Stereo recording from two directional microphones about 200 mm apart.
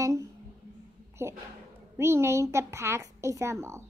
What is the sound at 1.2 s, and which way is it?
A woman's voice, 15° right (ahead or behind).